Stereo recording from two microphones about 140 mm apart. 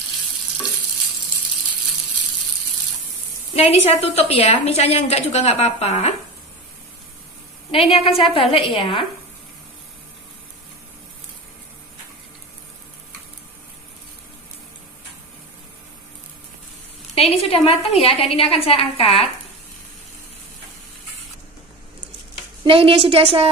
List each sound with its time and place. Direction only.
3.5 s a woman's voice: 50° left (ahead or behind)
7.7 s a woman's voice: 40° left (ahead or behind)
17.1 s a woman's voice: 45° left (ahead or behind)
22.7 s a woman's voice: 40° right (ahead or behind)